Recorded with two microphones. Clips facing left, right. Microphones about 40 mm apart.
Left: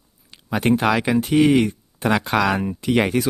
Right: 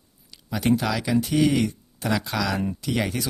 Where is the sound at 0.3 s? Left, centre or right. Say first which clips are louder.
Left 3 dB; left.